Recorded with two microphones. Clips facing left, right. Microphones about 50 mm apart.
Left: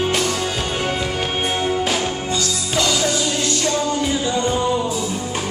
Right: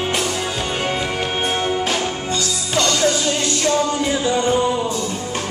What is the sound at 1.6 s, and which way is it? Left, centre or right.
Music, centre.